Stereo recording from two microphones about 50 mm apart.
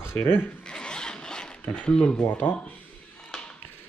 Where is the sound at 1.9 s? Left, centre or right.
Left.